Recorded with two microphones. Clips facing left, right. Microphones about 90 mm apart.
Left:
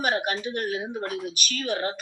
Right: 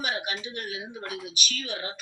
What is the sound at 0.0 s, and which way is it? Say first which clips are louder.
Speech: left 6 dB; 50° left (ahead or behind).